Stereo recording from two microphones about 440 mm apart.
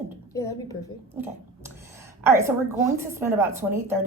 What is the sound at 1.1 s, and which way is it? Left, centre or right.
A woman's voice, centre.